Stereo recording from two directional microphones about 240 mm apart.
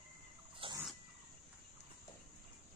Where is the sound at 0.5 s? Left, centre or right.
Right.